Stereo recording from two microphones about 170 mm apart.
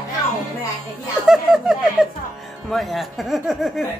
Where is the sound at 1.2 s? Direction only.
5° right (ahead or behind).